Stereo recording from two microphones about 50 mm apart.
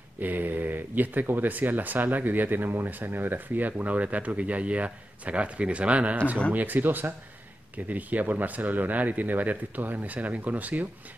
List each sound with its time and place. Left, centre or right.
0.2 s speech: right
6.5 s speech: right